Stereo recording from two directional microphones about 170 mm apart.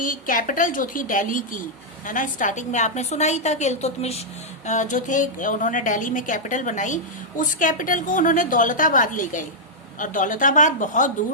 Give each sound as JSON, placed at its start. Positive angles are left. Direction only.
{"t": 0.0, "sound": "a woman's voice", "side_deg": 50}